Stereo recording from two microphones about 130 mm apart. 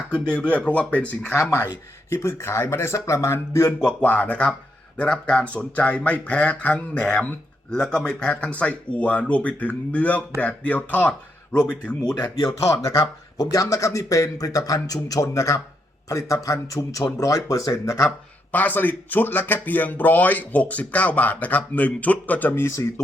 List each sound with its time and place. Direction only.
0.5 s speech: 10° left (ahead or behind)
1.4 s speech: 20° left (ahead or behind)
3.8 s speech: 10° left (ahead or behind)
12.4 s speech: 45° left (ahead or behind)
13.3 s speech: 30° left (ahead or behind)
18.5 s speech: 15° left (ahead or behind)